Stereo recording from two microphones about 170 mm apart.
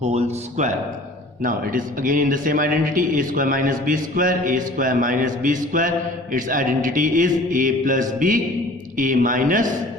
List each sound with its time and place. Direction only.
0.0 s speech: 40° right (ahead or behind)
1.4 s a man's voice: 50° right (ahead or behind)